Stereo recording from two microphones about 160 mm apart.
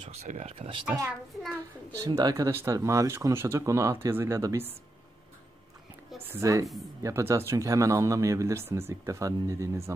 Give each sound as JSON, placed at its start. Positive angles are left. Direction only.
{"t": 0.1, "sound": "speech", "side_deg": -45}
{"t": 2.0, "sound": "speech", "side_deg": -20}
{"t": 6.2, "sound": "speech", "side_deg": -15}